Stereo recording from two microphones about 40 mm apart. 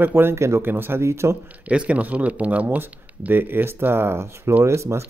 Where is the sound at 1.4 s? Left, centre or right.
Right.